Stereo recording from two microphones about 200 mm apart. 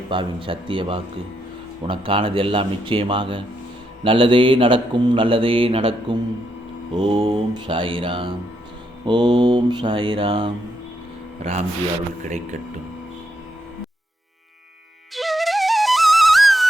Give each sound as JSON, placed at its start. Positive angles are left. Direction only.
{"t": 0.1, "sound": "speech", "side_deg": -25}
{"t": 12.2, "sound": "speech", "side_deg": -35}
{"t": 15.1, "sound": "music", "side_deg": 0}